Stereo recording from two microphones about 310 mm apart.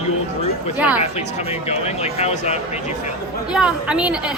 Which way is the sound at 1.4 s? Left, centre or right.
Centre.